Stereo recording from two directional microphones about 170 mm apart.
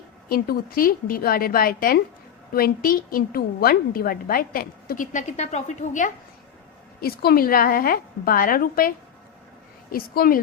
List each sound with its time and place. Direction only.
0.3 s a woman's voice: 60° left (ahead or behind)
7.0 s a woman's voice: 65° left (ahead or behind)
9.9 s a woman's voice: 60° left (ahead or behind)